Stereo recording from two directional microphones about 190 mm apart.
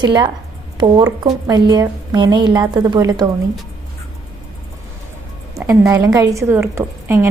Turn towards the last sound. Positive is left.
turn(degrees=-15)  # may be behind; listen again after turning